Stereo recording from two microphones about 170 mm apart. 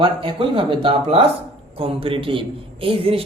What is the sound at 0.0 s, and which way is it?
A man's voice, 30° right (ahead or behind).